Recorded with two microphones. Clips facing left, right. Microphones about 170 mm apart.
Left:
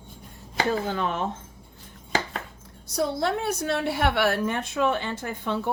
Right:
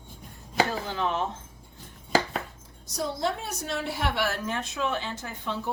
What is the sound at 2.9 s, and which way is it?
A woman's voice, 65° left (ahead or behind).